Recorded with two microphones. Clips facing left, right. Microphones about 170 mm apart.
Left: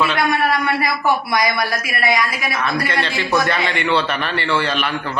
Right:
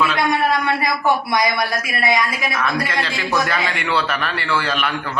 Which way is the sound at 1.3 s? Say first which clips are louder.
Even; 20° right (ahead or behind).